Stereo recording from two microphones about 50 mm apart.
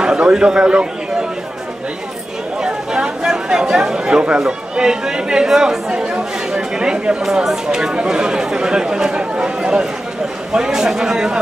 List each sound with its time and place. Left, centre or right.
0.0 s a man's voice: centre
2.6 s speech: centre